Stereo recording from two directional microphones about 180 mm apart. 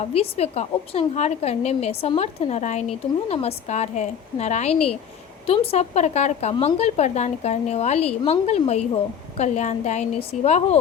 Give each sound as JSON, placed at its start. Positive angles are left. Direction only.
{"t": 0.0, "sound": "a woman's voice", "side_deg": 35}